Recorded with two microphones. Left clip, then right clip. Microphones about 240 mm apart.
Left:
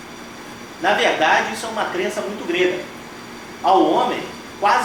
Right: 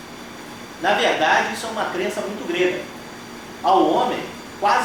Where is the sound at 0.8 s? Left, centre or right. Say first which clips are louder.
Left 1 dB; centre.